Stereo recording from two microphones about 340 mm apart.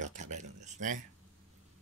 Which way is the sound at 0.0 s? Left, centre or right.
Right.